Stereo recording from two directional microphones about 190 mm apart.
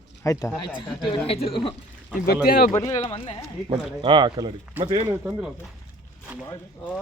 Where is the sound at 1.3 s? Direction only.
30° left (ahead or behind).